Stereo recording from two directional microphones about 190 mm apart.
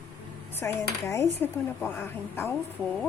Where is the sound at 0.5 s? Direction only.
15° left (ahead or behind).